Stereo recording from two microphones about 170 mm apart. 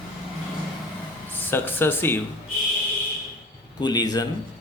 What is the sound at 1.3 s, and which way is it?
Speech, 10° left (ahead or behind).